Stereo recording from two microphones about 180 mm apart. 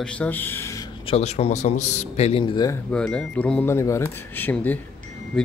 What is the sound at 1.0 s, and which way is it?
Speech, 35° left (ahead or behind).